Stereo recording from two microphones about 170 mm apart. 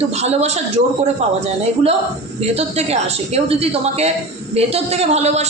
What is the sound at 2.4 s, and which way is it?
A man's voice, 40° right (ahead or behind).